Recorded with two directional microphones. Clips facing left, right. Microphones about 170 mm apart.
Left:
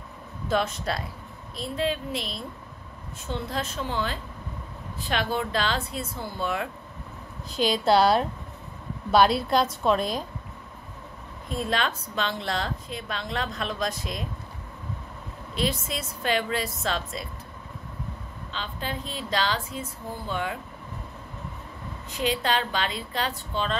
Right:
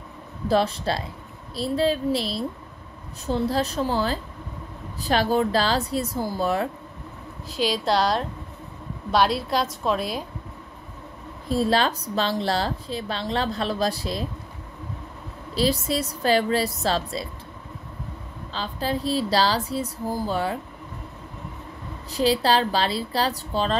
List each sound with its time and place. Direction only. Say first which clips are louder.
0.5 s a woman's voice: right 4 dB; 35° right (ahead or behind)
7.5 s a woman's voice: left 2 dB; centre (ahead or behind)
11.4 s a woman's voice: right 6 dB; 35° right (ahead or behind)
15.5 s a woman's voice: right 6 dB; 35° right (ahead or behind)
18.5 s a woman's voice: right 7 dB; 35° right (ahead or behind)
22.1 s a woman's voice: right 6 dB; 35° right (ahead or behind)